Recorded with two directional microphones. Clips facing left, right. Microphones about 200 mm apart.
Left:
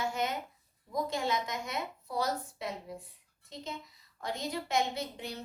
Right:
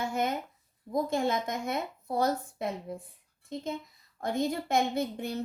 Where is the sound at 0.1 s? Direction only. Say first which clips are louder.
Right 4 dB; 50° right (ahead or behind).